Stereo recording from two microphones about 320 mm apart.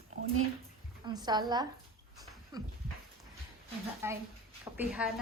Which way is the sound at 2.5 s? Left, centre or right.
Centre.